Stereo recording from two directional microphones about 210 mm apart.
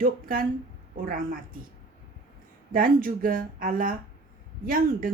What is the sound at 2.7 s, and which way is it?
A woman's voice, 40° right (ahead or behind).